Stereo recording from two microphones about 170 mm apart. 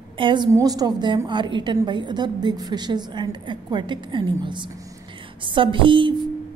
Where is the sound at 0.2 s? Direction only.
30° right (ahead or behind).